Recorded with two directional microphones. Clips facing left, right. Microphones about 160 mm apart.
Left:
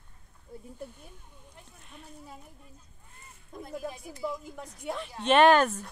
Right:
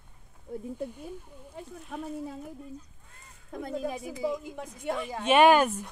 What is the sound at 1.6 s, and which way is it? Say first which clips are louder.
Speech: right 14 dB; 90° right.